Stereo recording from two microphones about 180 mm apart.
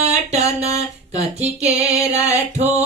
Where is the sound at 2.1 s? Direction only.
35° right (ahead or behind).